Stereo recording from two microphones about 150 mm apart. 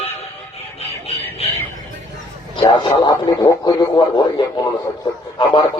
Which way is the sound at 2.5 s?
30° left (ahead or behind).